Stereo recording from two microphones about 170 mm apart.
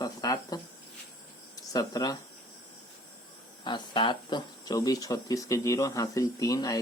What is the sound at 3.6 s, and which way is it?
Speech, 25° left (ahead or behind).